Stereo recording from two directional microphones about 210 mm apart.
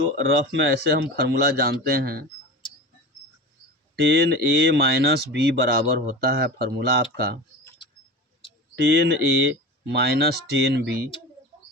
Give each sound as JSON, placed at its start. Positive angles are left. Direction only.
{"t": 0.2, "sound": "speech", "side_deg": -55}
{"t": 2.6, "sound": "tick-tock", "side_deg": 25}
{"t": 3.9, "sound": "speech", "side_deg": -50}
{"t": 8.7, "sound": "speech", "side_deg": -50}